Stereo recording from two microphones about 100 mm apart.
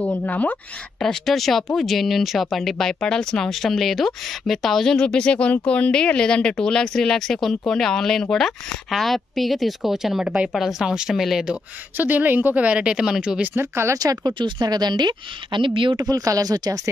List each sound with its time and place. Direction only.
0.0 s speech: 15° left (ahead or behind); by 11.5 s centre (ahead or behind)
12.0 s a woman's voice: 15° right (ahead or behind)
13.6 s speech: 25° right (ahead or behind)
13.9 s speech: 40° right (ahead or behind); by 16.0 s 60° right (ahead or behind)
16.0 s speech: 35° right (ahead or behind)